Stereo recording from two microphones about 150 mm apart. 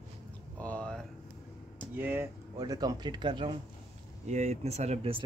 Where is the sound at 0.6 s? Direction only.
10° left (ahead or behind).